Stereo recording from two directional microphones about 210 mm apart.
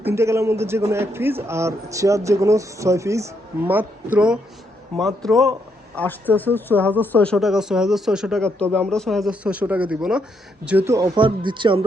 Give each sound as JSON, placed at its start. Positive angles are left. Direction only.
{"t": 0.0, "sound": "a man's voice", "side_deg": -15}